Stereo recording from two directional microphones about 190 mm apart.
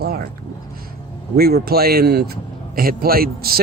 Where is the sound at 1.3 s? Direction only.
55° right (ahead or behind).